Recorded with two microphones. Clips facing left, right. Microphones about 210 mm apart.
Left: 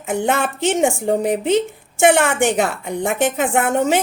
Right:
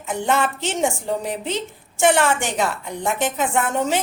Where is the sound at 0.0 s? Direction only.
55° left (ahead or behind).